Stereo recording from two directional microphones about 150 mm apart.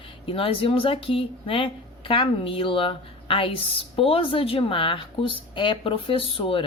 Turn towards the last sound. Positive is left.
turn(degrees=40)  # may be behind; listen again after turning